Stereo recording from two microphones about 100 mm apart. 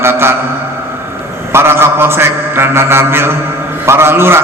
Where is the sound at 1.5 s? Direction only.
25° right (ahead or behind).